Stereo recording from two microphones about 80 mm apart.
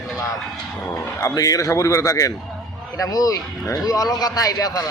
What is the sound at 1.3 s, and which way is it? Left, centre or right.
A man's voice, left.